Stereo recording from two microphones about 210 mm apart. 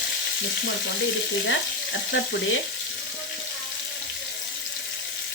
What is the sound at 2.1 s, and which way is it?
Frying, 55° left (ahead or behind).